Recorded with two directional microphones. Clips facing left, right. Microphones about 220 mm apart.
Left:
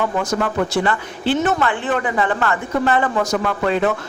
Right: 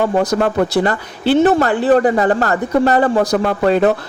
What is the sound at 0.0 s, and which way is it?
Speech, 35° right (ahead or behind).